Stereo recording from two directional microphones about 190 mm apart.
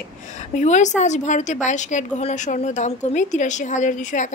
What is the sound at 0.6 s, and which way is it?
Speech, 40° left (ahead or behind).